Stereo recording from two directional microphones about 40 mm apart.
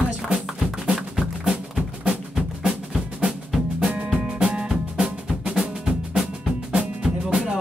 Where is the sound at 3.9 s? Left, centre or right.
Right.